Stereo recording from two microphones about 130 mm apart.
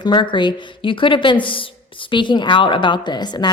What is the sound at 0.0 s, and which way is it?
Speech, 40° left (ahead or behind).